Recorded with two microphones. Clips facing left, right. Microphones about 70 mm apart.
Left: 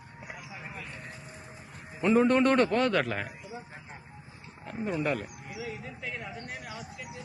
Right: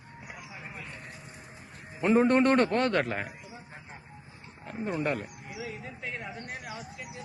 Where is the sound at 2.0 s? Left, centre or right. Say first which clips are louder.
Even; right.